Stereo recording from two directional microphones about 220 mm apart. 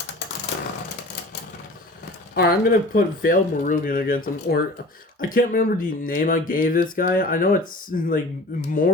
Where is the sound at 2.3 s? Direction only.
45° left (ahead or behind).